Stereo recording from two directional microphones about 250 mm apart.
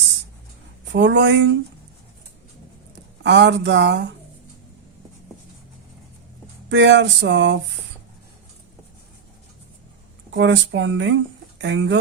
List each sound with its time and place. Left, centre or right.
0.9 s speech: right
3.2 s speech: right
6.7 s speech: right
10.3 s speech: right